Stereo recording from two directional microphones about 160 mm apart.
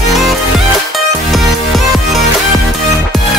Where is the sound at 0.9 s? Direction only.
Centre (ahead or behind).